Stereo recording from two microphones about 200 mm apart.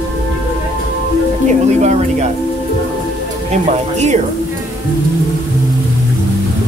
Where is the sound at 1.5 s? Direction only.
35° right (ahead or behind).